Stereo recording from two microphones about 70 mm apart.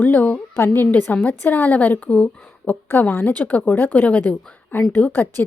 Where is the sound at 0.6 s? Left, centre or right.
Left.